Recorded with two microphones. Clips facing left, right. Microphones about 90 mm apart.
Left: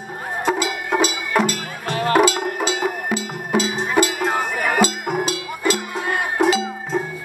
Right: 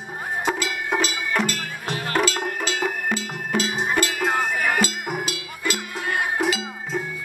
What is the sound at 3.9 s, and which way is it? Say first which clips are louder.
Cowbell: left 9 dB; 20° left (ahead or behind).